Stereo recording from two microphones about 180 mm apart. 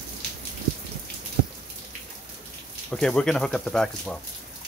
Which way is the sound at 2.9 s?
5° left (ahead or behind).